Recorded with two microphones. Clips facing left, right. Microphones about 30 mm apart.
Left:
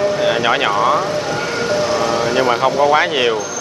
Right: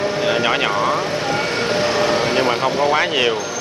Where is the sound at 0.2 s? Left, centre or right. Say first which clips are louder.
Left 2 dB; centre.